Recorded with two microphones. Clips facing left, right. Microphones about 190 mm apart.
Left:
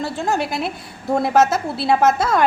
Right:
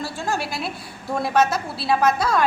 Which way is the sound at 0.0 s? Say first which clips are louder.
Left 5 dB; 20° left (ahead or behind).